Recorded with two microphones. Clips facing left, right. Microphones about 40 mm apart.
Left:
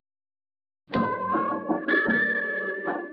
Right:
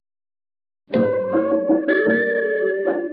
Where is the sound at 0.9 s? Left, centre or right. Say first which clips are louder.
Right 7 dB; centre.